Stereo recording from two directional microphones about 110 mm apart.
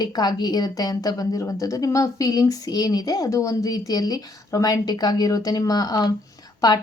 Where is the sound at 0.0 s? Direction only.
40° left (ahead or behind).